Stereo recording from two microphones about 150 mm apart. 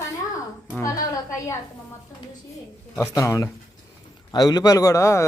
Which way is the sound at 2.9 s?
20° left (ahead or behind).